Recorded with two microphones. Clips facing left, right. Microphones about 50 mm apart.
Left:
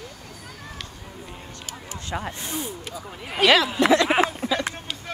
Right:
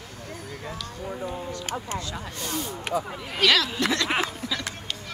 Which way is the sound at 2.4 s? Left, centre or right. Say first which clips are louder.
Right 1 dB; centre.